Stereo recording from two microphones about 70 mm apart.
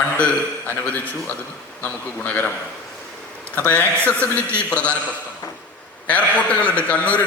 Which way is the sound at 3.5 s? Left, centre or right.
Left.